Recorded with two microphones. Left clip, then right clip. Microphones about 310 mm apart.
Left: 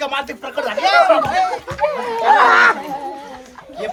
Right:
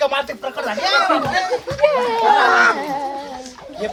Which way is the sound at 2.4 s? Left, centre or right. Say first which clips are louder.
Left 2 dB; left.